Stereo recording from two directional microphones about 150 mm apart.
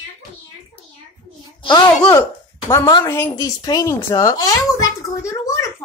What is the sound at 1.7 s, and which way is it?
Speech, 30° left (ahead or behind).